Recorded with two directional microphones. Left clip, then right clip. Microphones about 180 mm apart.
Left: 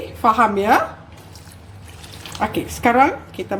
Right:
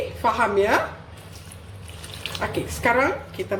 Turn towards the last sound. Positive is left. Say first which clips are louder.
# left 3 dB
turn(degrees=55)  # may be behind; listen again after turning